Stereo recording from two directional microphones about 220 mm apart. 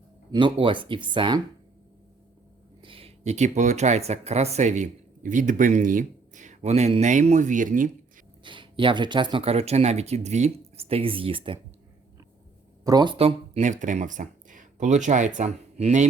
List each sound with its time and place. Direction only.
0.3 s speech: 20° right (ahead or behind)
2.8 s speech: 25° right (ahead or behind)
8.4 s speech: 20° right (ahead or behind)
12.8 s speech: 20° right (ahead or behind)